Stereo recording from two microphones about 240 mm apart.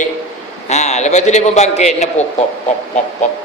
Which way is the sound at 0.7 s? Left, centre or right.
Left.